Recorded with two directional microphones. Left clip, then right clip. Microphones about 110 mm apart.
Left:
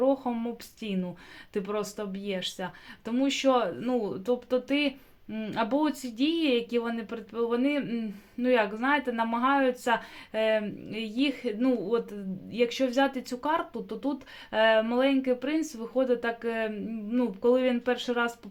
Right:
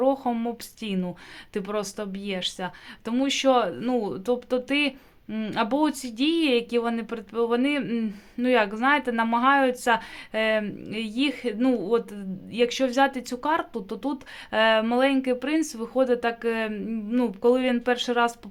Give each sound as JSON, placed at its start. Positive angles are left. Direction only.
{"t": 0.0, "sound": "speech", "side_deg": -35}